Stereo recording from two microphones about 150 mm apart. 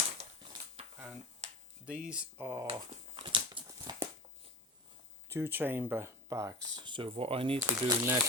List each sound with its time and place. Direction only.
1.8 s speech: 10° right (ahead or behind)
2.6 s dog: 35° right (ahead or behind)
3.7 s a sound: 20° right (ahead or behind)
5.3 s speech: 15° right (ahead or behind); by 7.6 s 40° right (ahead or behind)
7.6 s speech: 15° right (ahead or behind)